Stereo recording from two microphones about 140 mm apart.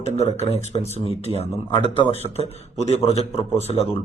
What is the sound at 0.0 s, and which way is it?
A man's voice, 50° left (ahead or behind).